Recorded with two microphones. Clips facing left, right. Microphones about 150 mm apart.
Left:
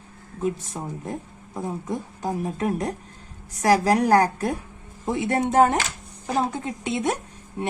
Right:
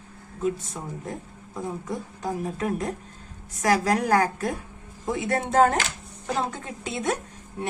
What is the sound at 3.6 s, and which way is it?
Speech, 35° left (ahead or behind).